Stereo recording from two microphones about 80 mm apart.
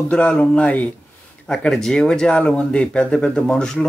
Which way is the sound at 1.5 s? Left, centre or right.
Centre.